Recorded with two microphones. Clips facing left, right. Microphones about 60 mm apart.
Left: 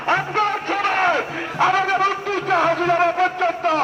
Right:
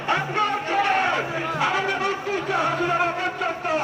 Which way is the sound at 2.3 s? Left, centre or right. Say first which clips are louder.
Left 5 dB; left.